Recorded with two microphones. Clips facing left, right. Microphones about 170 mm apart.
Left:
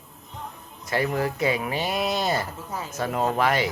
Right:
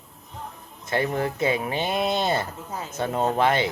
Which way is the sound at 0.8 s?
25° right (ahead or behind).